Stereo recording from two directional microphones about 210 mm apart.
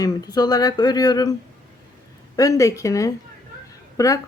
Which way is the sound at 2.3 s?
15° left (ahead or behind).